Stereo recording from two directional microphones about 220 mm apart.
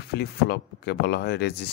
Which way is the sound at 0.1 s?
50° left (ahead or behind).